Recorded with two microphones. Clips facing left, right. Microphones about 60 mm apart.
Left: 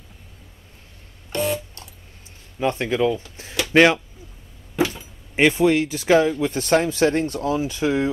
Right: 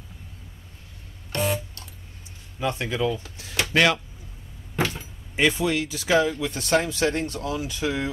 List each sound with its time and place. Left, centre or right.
1.3 s a sound: centre
2.6 s speech: left
5.3 s speech: left